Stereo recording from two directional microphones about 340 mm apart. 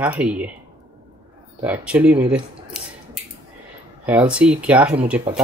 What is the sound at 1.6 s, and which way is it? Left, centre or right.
Scissors, centre.